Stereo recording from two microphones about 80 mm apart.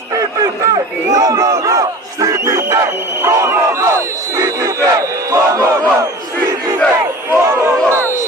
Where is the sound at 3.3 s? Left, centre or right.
Right.